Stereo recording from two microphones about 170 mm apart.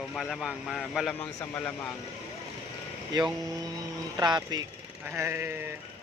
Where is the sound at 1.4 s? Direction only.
10° left (ahead or behind).